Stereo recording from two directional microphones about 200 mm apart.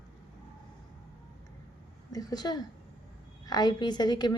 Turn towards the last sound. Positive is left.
turn(degrees=20)  # may be behind; listen again after turning